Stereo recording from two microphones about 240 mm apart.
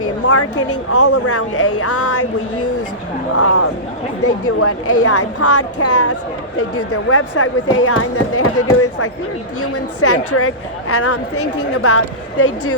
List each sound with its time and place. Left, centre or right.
0.0 s a sound: left
0.7 s a woman's voice: left
3.3 s a woman's voice: left